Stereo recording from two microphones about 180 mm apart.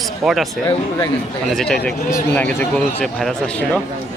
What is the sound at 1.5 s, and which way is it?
Speech, 5° left (ahead or behind).